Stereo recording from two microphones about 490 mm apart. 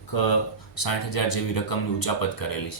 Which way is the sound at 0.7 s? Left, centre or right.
Left.